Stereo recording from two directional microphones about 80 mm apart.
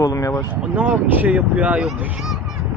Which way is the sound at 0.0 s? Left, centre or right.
Left.